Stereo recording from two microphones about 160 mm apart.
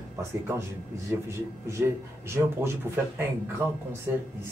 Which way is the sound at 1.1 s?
15° right (ahead or behind).